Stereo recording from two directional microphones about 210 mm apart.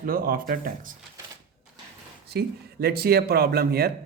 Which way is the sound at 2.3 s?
50° right (ahead or behind).